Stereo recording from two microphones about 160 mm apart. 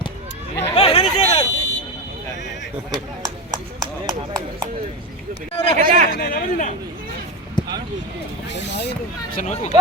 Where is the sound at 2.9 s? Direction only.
25° right (ahead or behind).